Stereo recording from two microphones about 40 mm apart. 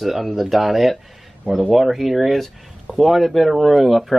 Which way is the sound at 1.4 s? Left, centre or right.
Right.